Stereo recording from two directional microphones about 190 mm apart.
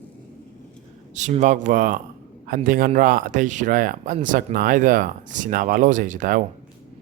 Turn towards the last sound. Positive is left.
turn(degrees=-45)  # may be behind; listen again after turning